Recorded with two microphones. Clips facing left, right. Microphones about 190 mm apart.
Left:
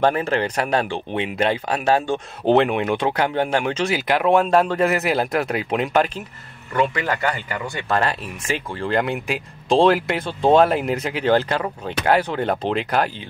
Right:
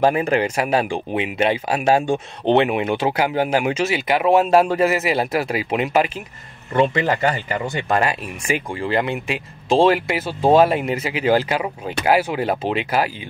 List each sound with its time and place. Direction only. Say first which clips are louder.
0.0 s speech: right 2 dB; 10° right (ahead or behind)
2.4 s speech: even; centre (ahead or behind)
6.7 s speech: right 3 dB; 25° right (ahead or behind); by 13.1 s 5° right (ahead or behind)